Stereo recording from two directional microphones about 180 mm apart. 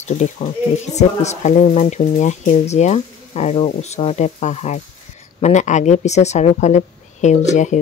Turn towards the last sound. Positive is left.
turn(degrees=40)  # may be behind; listen again after turning